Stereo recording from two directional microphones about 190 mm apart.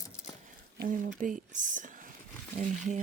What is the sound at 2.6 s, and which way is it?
Speech, 40° right (ahead or behind).